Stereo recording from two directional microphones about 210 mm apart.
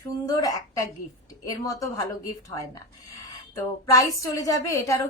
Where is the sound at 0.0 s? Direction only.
15° left (ahead or behind).